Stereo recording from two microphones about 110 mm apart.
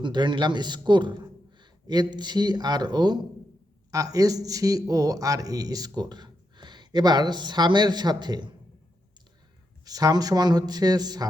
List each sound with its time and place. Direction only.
0.0 s a man's voice: 45° right (ahead or behind)
9.8 s speech: 35° right (ahead or behind)